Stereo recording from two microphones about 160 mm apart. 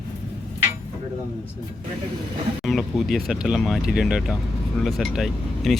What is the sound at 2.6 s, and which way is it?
Speech, centre (ahead or behind).